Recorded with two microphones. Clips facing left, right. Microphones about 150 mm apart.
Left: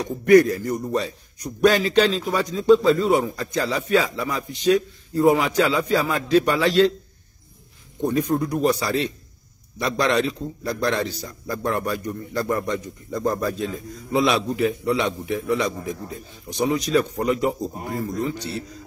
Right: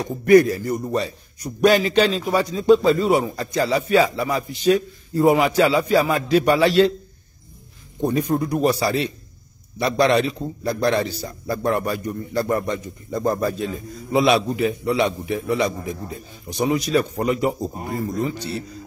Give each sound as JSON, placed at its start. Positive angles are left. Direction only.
{"t": 0.2, "sound": "a man's voice", "side_deg": -5}
{"t": 8.0, "sound": "a man's voice", "side_deg": -10}